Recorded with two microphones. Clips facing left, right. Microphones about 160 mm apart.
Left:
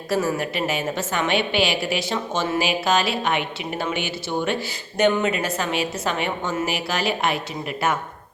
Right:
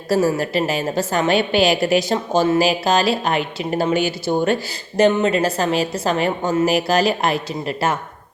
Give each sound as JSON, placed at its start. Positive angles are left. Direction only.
{"t": 0.1, "sound": "a woman's voice", "side_deg": -35}